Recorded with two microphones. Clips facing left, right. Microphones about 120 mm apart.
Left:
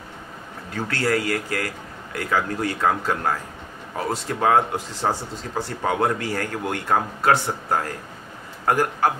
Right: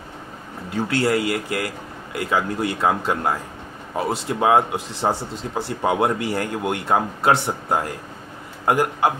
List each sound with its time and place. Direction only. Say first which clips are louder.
0.7 s speech: right 3 dB; 20° right (ahead or behind)